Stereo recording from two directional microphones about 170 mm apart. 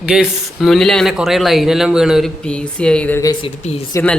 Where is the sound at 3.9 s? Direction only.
10° left (ahead or behind).